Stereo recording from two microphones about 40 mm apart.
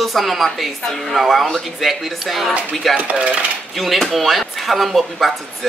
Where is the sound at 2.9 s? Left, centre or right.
Right.